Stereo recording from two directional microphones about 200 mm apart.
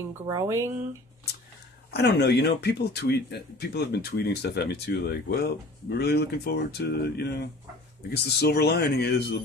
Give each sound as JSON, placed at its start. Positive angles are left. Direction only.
{"t": 0.3, "sound": "speech", "side_deg": -15}
{"t": 1.9, "sound": "speech", "side_deg": 55}